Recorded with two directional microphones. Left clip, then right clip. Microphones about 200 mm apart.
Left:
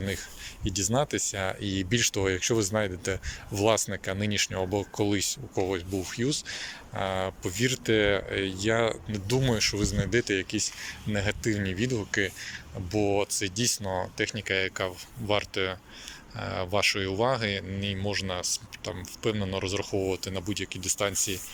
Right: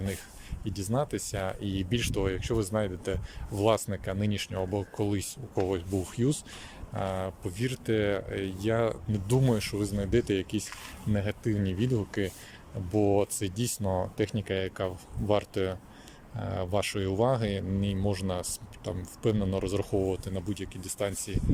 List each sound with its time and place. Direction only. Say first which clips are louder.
0.6 s speech: left 4 dB; 5° right (ahead or behind)